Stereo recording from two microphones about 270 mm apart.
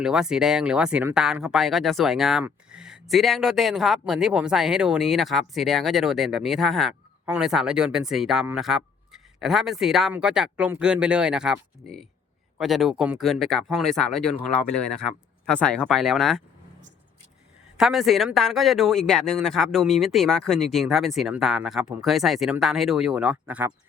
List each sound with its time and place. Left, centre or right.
0.0 s speech: centre
17.7 s speech: centre